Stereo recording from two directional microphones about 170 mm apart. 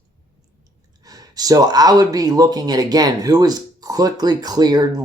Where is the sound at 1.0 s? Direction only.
20° right (ahead or behind).